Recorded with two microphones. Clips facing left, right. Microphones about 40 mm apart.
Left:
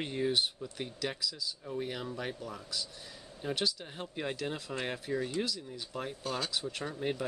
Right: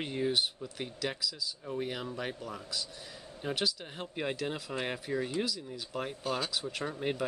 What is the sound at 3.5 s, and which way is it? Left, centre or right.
Speech, centre.